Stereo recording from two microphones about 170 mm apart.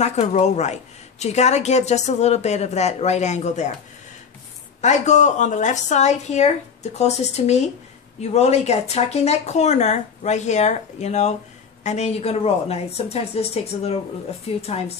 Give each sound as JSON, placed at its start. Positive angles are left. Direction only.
{"t": 0.0, "sound": "speech", "side_deg": 40}
{"t": 4.8, "sound": "speech", "side_deg": 45}